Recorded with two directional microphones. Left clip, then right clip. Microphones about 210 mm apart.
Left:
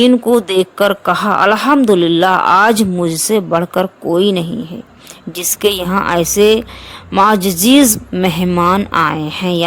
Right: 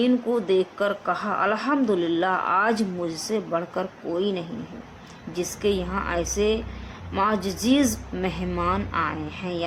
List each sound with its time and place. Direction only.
0.0 s a woman's voice: 50° left (ahead or behind)